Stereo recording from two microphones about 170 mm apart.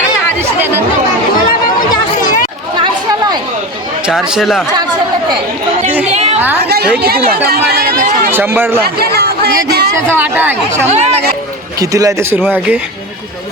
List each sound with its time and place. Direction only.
2.7 s chatter: 30° right (ahead or behind)
4.0 s speech: 5° right (ahead or behind)
6.1 s a sound: 40° right (ahead or behind)
6.6 s speech: 70° right (ahead or behind)
8.3 s speech: 15° right (ahead or behind)
8.8 s chatter: 65° right (ahead or behind)
9.6 s a sound: 75° right (ahead or behind)
10.1 s speech: 10° right (ahead or behind)
10.8 s speech: 40° right (ahead or behind)
11.8 s speech: 20° right (ahead or behind)